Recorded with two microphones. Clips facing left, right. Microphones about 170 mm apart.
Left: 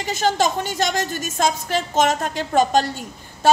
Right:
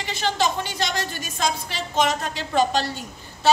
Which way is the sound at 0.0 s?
45° left (ahead or behind).